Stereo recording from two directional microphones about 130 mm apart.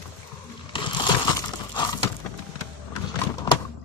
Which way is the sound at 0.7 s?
40° left (ahead or behind).